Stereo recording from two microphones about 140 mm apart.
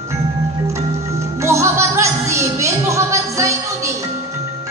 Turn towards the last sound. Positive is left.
turn(degrees=-20)  # may be behind; listen again after turning